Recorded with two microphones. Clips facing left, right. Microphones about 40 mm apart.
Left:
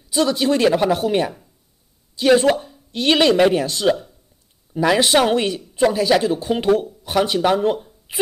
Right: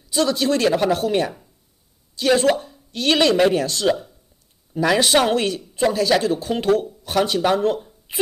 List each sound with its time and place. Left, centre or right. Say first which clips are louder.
0.1 s speech: left 1 dB; centre